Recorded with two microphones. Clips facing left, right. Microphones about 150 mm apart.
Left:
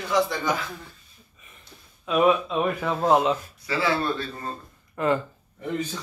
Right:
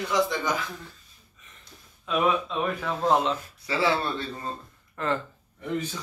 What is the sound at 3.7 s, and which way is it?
Speech, 25° right (ahead or behind).